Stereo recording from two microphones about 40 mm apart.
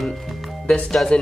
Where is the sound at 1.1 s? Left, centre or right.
Left.